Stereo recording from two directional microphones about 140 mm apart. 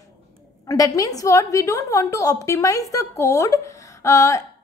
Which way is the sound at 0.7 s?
25° left (ahead or behind).